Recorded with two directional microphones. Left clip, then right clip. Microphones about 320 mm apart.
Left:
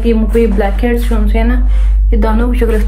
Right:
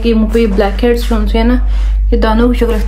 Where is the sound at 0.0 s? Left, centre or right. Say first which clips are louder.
Even; centre.